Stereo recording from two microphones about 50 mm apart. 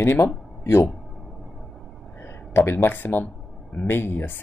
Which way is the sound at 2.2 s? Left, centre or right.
Left.